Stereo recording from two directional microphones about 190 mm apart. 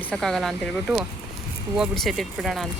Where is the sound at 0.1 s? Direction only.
Centre (ahead or behind).